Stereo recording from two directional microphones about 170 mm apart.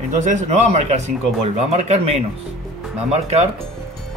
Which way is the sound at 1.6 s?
40° right (ahead or behind).